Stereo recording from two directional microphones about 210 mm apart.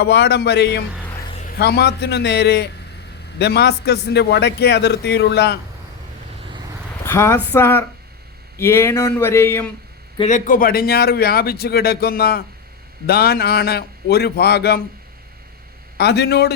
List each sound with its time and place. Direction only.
0.0 s a man's voice: 50° left (ahead or behind)
1.2 s a sound: 25° left (ahead or behind)
1.5 s a man's voice: 50° left (ahead or behind)
7.0 s speech: 10° left (ahead or behind)
10.2 s a man's voice: 35° left (ahead or behind)
16.0 s a man's voice: 50° left (ahead or behind)